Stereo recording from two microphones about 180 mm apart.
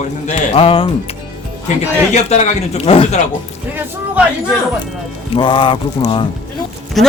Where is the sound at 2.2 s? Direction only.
40° left (ahead or behind).